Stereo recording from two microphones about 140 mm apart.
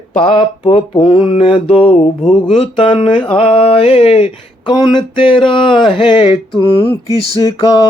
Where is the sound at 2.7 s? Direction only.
40° left (ahead or behind).